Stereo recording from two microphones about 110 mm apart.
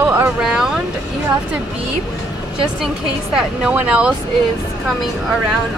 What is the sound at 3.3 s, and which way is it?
Speech, 5° right (ahead or behind).